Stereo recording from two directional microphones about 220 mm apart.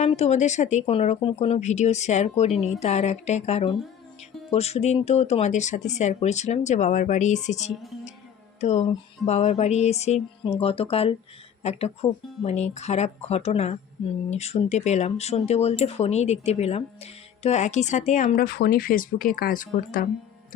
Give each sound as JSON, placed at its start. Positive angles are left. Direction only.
{"t": 0.0, "sound": "speech", "side_deg": 30}